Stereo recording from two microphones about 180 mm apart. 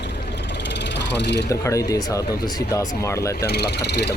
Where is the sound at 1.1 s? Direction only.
70° left (ahead or behind).